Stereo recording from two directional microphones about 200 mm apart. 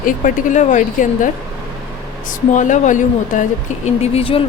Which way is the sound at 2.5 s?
40° left (ahead or behind).